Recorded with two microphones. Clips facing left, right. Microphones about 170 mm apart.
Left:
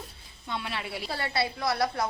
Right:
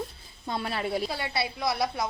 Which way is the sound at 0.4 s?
40° right (ahead or behind).